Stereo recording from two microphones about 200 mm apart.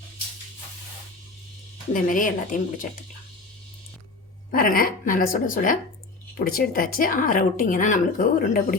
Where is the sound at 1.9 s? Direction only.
40° left (ahead or behind).